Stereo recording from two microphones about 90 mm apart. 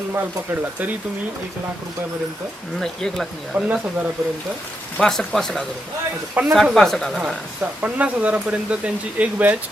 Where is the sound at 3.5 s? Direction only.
25° right (ahead or behind).